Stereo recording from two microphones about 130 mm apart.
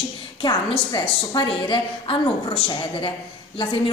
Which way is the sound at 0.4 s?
35° left (ahead or behind).